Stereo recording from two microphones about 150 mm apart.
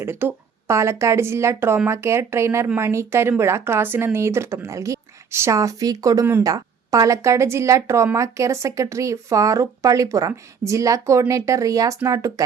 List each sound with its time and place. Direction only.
0.0 s speech: 15° right (ahead or behind)